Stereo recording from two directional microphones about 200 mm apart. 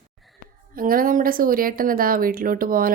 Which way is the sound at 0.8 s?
45° right (ahead or behind).